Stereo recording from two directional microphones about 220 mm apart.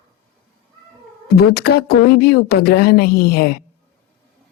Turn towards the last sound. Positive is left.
turn(degrees=45)  # may be behind; listen again after turning